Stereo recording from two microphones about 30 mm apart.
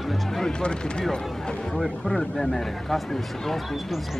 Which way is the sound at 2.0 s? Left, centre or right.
Centre.